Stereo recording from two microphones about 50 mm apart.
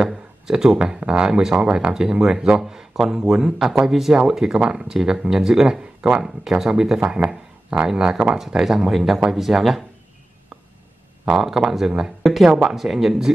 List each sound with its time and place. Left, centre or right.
0.0 s speech: centre
7.0 s speech: right
7.8 s speech: centre
11.2 s speech: centre